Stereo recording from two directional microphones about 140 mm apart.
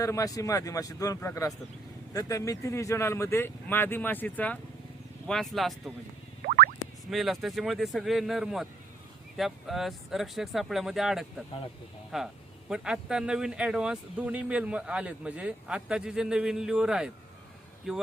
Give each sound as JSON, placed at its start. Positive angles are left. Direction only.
{"t": 0.0, "sound": "speech", "side_deg": 25}
{"t": 6.4, "sound": "music", "side_deg": -90}
{"t": 7.1, "sound": "speech", "side_deg": 0}